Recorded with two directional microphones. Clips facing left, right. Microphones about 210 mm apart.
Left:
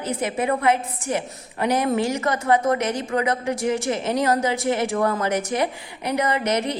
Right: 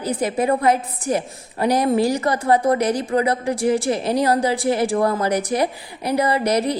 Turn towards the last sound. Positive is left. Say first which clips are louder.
# right 3 dB
turn(degrees=-35)  # may be behind; listen again after turning